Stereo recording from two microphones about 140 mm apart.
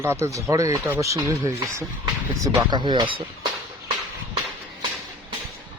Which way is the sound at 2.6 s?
30° right (ahead or behind).